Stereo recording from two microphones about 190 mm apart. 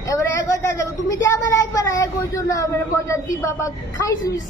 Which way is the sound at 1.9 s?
15° left (ahead or behind).